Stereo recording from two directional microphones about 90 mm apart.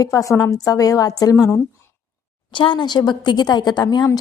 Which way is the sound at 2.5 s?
60° left (ahead or behind).